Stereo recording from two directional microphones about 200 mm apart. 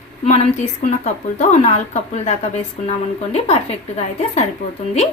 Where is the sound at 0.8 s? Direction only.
40° left (ahead or behind).